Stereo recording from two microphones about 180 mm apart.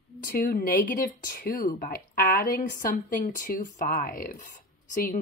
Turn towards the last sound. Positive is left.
turn(degrees=50)  # may be behind; listen again after turning